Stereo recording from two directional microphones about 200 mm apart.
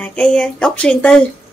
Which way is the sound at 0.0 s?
5° left (ahead or behind).